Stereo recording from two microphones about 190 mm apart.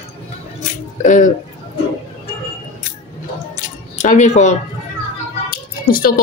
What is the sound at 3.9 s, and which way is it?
Speech, 40° left (ahead or behind).